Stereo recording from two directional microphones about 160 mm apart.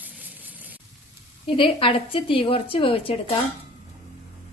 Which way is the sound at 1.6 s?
35° left (ahead or behind).